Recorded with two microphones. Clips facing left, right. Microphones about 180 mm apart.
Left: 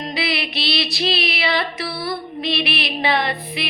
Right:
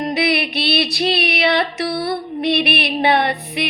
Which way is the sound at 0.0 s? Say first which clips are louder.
Right 6 dB; 60° right (ahead or behind).